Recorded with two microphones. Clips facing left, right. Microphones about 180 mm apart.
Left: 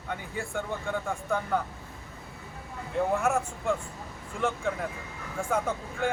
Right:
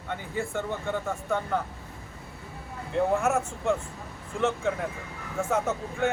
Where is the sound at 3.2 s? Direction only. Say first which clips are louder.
Right 2 dB; centre (ahead or behind).